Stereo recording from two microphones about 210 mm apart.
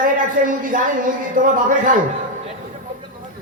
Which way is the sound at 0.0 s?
40° right (ahead or behind).